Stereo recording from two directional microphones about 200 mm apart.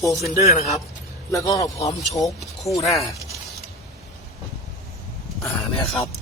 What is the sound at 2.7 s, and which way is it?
Speech, 30° left (ahead or behind).